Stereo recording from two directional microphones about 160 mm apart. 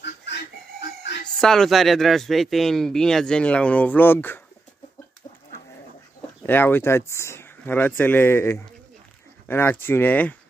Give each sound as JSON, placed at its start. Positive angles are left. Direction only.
{"t": 0.0, "sound": "chicken", "side_deg": 90}
{"t": 1.4, "sound": "speech", "side_deg": 5}
{"t": 6.4, "sound": "speech", "side_deg": 15}